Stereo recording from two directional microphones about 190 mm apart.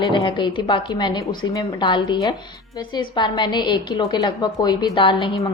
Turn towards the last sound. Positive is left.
turn(degrees=25)  # may be behind; listen again after turning